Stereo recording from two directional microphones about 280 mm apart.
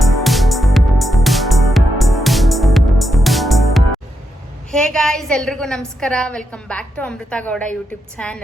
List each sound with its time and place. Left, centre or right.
0.0 s music: centre
4.7 s a woman's voice: centre